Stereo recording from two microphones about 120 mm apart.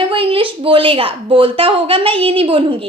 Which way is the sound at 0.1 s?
50° right (ahead or behind).